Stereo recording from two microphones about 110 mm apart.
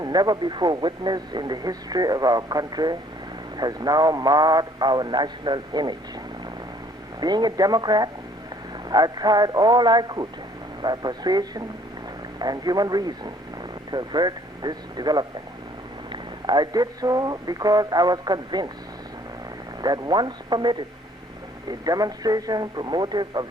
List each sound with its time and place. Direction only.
0.0 s speech: 40° right (ahead or behind)
7.2 s speech: 40° right (ahead or behind)
19.8 s speech: 40° right (ahead or behind)